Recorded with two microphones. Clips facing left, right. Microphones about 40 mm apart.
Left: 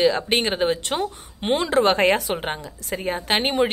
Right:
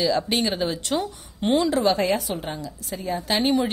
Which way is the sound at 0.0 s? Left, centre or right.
Left.